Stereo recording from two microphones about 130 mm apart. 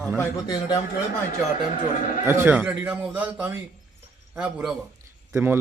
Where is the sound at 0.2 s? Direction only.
25° left (ahead or behind).